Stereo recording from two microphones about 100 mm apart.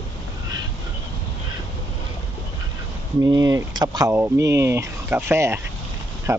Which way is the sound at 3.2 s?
35° right (ahead or behind).